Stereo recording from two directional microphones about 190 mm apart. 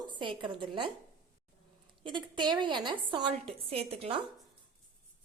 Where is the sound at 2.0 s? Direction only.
25° right (ahead or behind).